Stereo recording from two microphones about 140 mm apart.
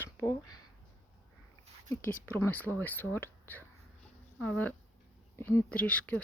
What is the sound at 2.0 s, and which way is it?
Speech, 15° left (ahead or behind).